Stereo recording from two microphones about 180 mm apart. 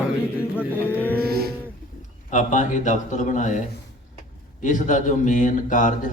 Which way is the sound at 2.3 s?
45° left (ahead or behind).